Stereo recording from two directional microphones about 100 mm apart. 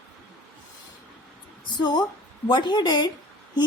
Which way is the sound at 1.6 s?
50° left (ahead or behind).